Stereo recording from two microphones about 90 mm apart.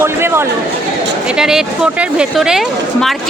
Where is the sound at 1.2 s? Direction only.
5° right (ahead or behind).